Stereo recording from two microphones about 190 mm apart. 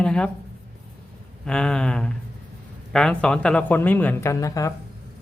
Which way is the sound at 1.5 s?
5° left (ahead or behind).